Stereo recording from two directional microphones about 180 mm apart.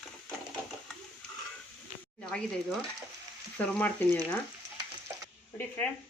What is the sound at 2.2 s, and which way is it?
Speech, 5° left (ahead or behind).